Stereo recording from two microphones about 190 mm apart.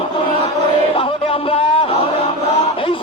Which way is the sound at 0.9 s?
30° left (ahead or behind).